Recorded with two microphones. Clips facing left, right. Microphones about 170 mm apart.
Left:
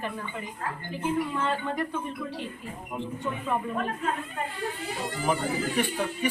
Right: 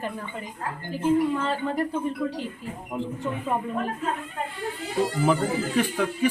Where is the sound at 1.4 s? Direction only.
35° right (ahead or behind).